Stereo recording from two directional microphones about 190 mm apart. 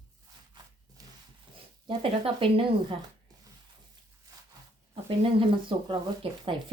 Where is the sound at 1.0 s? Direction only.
20° right (ahead or behind).